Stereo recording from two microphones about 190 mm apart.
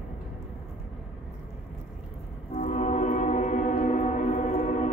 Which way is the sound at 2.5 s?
40° left (ahead or behind).